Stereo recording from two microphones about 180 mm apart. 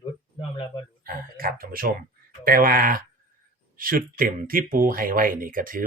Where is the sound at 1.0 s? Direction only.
55° right (ahead or behind).